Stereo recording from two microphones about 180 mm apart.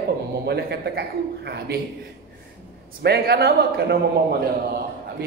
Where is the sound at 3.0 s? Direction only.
65° right (ahead or behind).